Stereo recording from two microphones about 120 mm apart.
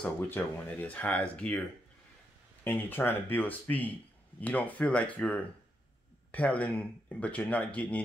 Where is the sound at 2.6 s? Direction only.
15° left (ahead or behind).